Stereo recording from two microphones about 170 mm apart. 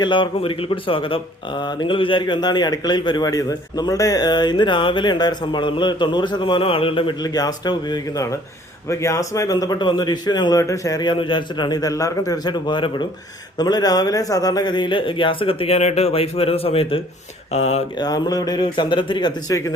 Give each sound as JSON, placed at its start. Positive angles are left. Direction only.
{"t": 0.0, "sound": "speech", "side_deg": 30}
{"t": 17.9, "sound": "speech", "side_deg": 20}